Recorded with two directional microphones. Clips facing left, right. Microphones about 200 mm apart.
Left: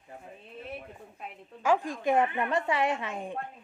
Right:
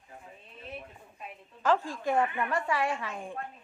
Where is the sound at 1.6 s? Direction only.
15° left (ahead or behind).